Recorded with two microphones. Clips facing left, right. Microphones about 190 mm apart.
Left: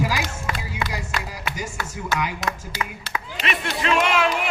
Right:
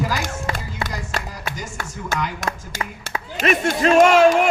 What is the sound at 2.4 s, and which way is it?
Speech, 50° right (ahead or behind).